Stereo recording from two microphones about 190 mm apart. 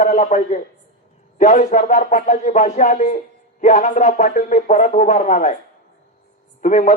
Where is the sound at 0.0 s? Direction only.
35° left (ahead or behind).